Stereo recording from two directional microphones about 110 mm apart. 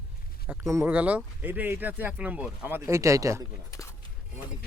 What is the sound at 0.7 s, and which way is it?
Speech, 25° right (ahead or behind).